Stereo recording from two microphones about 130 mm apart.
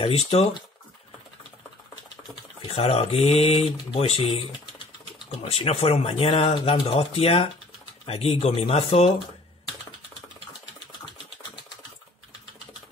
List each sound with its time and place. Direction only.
0.0 s speech: 50° left (ahead or behind)
2.7 s speech: 50° left (ahead or behind)
5.4 s speech: 45° left (ahead or behind)